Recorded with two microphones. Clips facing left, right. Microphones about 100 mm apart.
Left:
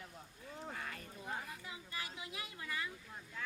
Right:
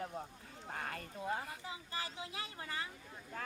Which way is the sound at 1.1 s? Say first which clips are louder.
Right 6 dB; 40° right (ahead or behind).